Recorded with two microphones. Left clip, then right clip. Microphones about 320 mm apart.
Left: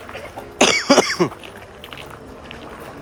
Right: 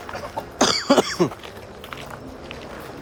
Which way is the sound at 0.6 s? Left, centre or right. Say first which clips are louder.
Left 4 dB; centre.